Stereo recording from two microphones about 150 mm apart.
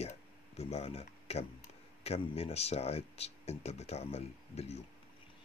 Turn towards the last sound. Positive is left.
turn(degrees=45)  # may be behind; listen again after turning